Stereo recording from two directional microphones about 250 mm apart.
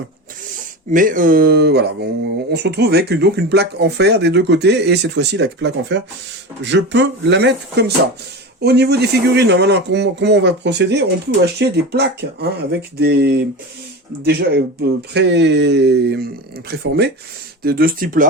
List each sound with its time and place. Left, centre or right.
0.9 s speech: right